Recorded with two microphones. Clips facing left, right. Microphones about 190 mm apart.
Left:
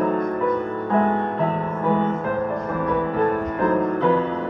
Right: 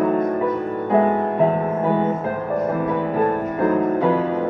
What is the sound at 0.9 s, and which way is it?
Music, 15° right (ahead or behind).